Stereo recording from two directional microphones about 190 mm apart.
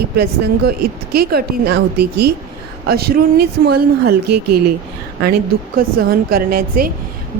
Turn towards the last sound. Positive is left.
turn(degrees=-50)  # may be behind; listen again after turning